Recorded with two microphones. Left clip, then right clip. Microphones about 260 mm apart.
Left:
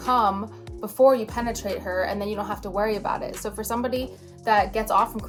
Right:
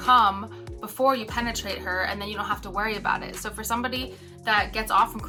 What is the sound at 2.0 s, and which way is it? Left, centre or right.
Speech, right.